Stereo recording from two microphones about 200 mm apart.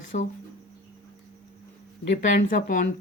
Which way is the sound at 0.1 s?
45° left (ahead or behind).